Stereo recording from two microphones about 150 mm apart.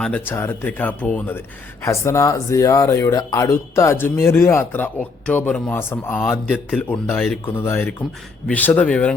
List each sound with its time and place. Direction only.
0.0 s speech: 10° left (ahead or behind)